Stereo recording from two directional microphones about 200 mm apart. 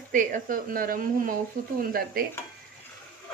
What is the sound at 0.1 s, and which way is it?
Speech, 40° right (ahead or behind).